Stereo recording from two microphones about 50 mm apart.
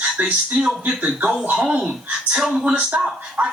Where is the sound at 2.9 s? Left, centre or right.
Centre.